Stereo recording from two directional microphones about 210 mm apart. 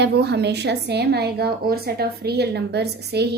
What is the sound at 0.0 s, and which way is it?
A woman's voice, 50° right (ahead or behind).